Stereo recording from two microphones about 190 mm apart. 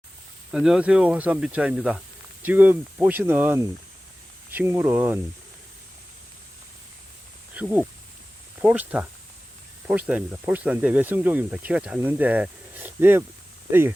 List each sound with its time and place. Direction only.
0.5 s speech: 5° right (ahead or behind)
7.5 s speech: 5° right (ahead or behind)